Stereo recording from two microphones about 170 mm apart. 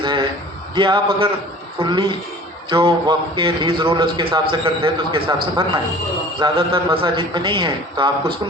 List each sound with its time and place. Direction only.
0.0 s a man's voice: 30° right (ahead or behind)
6.4 s a man's voice: 30° right (ahead or behind)